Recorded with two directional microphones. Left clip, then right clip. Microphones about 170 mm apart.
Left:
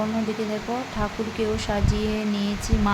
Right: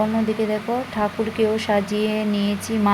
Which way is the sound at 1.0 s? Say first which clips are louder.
Right 7 dB; 20° right (ahead or behind).